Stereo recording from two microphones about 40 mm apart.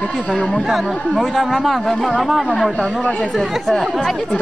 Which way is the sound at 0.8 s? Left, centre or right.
Centre.